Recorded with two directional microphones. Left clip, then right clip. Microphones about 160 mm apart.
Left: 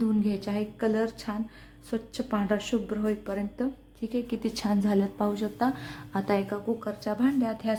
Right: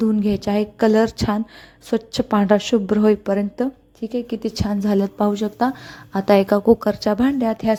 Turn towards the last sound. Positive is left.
turn(degrees=-40)  # may be behind; listen again after turning